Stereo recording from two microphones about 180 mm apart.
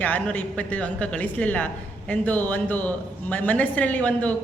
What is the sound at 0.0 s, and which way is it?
A woman's voice, 10° left (ahead or behind).